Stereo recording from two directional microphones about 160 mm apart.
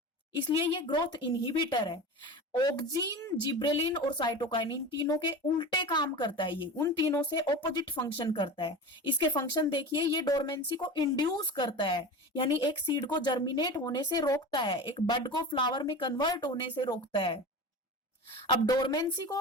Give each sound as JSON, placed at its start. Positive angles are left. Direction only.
{"t": 0.7, "sound": "a woman's voice", "side_deg": 30}